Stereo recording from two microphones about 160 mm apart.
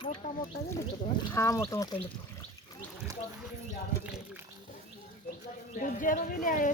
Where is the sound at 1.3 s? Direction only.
20° left (ahead or behind).